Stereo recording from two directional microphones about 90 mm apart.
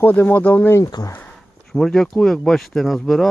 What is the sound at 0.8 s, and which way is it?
Speech, 40° left (ahead or behind).